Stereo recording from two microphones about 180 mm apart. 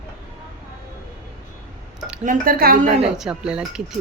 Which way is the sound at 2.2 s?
50° right (ahead or behind).